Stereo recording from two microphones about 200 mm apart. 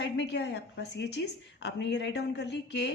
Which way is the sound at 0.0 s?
60° left (ahead or behind).